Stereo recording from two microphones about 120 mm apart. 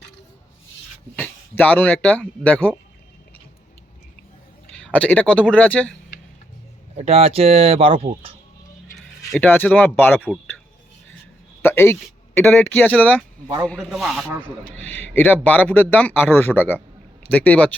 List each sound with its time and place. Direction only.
1.1 s speech: 15° left (ahead or behind)
4.8 s speech: 10° left (ahead or behind)
6.9 s speech: 60° right (ahead or behind)
9.4 s speech: 15° left (ahead or behind)
11.6 s a sound: 20° left (ahead or behind)
12.4 s speech: 15° left (ahead or behind)
13.9 s speech: centre (ahead or behind)
14.8 s speech: 15° left (ahead or behind)